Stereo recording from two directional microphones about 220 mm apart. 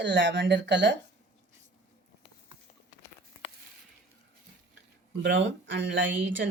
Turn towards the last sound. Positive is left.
turn(degrees=-55)  # may be behind; listen again after turning